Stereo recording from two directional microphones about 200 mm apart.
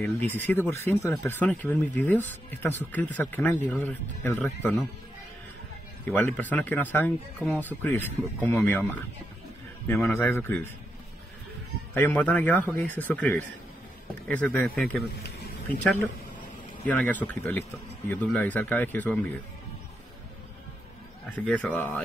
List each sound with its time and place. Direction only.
0.0 s speech: 10° left (ahead or behind)
6.0 s speech: 10° left (ahead or behind)
11.9 s speech: 10° left (ahead or behind)
15.1 s a sound: 50° left (ahead or behind)
16.8 s speech: 5° left (ahead or behind)
21.5 s speech: 5° left (ahead or behind)